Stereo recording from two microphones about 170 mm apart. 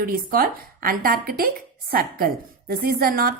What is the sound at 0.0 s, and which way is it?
A woman's voice, 60° right (ahead or behind).